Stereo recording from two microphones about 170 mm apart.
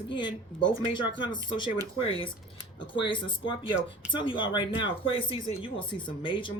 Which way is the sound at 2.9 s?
30° left (ahead or behind).